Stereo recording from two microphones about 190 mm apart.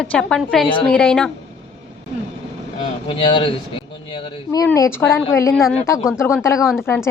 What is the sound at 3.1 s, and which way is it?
Speech, 25° left (ahead or behind).